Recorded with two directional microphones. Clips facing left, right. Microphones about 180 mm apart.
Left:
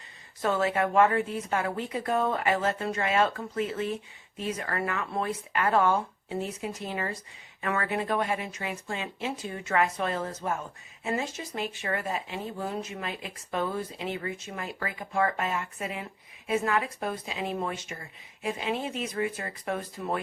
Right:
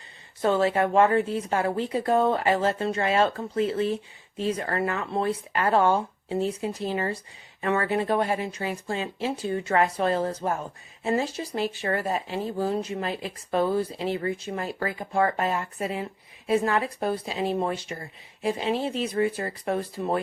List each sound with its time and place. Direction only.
0.4 s speech: 30° right (ahead or behind)